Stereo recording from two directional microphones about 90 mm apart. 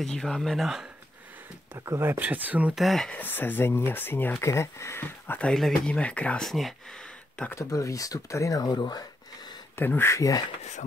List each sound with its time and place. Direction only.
0.0 s speech: 5° left (ahead or behind)
1.9 s speech: 25° right (ahead or behind)
2.7 s speech: centre (ahead or behind)
3.1 s speech: 20° left (ahead or behind)
5.4 s speech: 5° left (ahead or behind)
6.4 s speech: centre (ahead or behind)
7.5 s speech: 35° left (ahead or behind)
8.6 s speech: 55° left (ahead or behind)
9.8 s speech: 25° left (ahead or behind)